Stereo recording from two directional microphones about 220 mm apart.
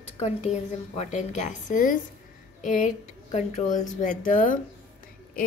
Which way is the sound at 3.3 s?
35° left (ahead or behind).